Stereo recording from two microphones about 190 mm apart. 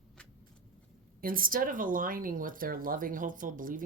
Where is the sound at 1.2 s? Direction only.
45° right (ahead or behind).